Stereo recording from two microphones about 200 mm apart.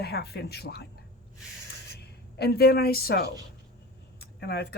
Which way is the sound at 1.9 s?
55° left (ahead or behind).